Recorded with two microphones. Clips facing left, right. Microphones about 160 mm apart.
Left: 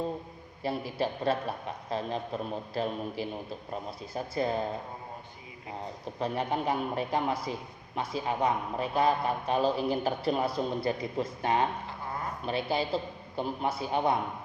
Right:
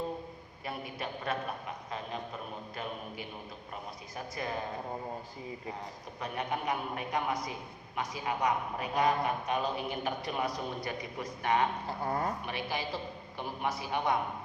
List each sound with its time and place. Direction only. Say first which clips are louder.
0.6 s a man's voice: left 8 dB; 30° left (ahead or behind)
4.1 s a man's voice: left 8 dB; 30° left (ahead or behind)
6.1 s a man's voice: left 5 dB; 30° left (ahead or behind)